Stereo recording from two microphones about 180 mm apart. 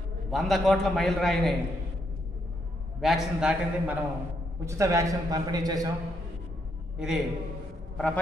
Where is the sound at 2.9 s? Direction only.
Centre (ahead or behind).